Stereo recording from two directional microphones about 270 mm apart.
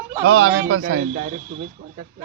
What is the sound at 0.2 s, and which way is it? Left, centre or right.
Speech, right.